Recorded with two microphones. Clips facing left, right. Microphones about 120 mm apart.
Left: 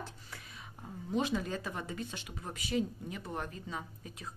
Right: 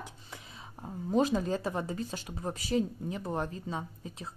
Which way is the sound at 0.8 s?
40° right (ahead or behind).